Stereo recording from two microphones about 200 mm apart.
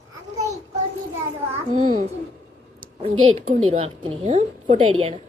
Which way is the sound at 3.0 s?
30° right (ahead or behind).